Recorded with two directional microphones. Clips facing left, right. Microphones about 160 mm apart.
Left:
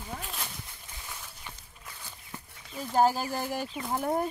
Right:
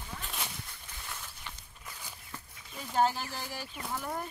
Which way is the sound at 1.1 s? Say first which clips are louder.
Even; 5° left (ahead or behind).